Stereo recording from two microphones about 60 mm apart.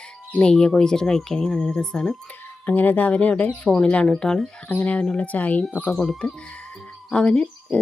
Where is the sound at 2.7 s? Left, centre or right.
Left; by 4.4 s centre.